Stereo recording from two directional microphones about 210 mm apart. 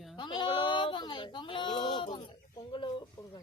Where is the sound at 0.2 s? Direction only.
20° left (ahead or behind).